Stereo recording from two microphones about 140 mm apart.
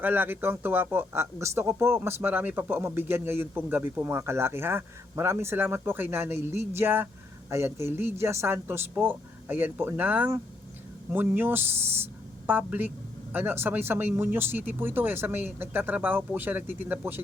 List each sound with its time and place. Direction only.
0.0 s speech: 15° right (ahead or behind)